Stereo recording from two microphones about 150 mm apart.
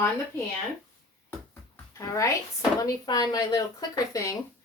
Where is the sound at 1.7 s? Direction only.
20° left (ahead or behind).